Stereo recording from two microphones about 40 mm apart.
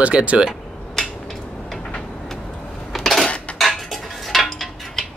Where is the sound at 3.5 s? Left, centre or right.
Centre.